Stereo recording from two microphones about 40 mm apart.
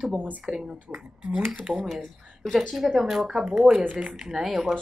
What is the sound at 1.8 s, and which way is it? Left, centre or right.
A woman's voice, centre.